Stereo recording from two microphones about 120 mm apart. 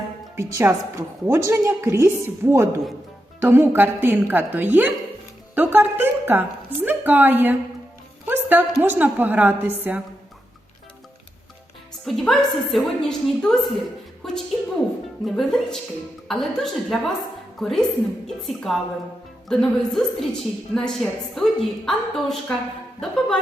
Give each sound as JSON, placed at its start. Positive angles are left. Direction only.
{"t": 0.3, "sound": "a woman's voice", "side_deg": -20}
{"t": 8.3, "sound": "a sound", "side_deg": -15}
{"t": 8.8, "sound": "a woman's voice", "side_deg": -15}
{"t": 12.0, "sound": "a woman's voice", "side_deg": 0}
{"t": 15.2, "sound": "a woman's voice", "side_deg": 0}